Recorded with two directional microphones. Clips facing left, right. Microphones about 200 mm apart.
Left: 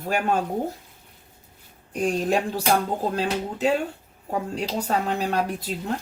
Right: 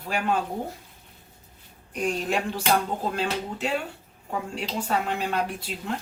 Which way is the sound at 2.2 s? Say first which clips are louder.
Left 3 dB; 35° left (ahead or behind).